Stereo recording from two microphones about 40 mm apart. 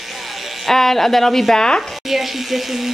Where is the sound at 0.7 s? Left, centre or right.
Centre.